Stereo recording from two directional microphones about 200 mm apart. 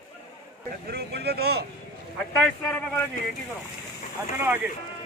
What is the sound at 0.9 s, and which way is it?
Speech, 55° right (ahead or behind).